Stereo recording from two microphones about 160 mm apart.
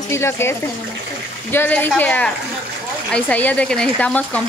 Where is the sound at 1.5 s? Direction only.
10° left (ahead or behind).